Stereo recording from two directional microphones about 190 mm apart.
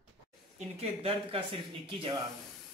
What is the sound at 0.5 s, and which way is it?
A man's voice, 30° right (ahead or behind).